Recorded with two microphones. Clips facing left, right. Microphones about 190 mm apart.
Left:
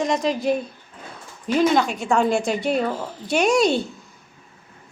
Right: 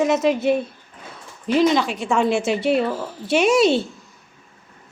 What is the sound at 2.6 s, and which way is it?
Speech, 45° left (ahead or behind).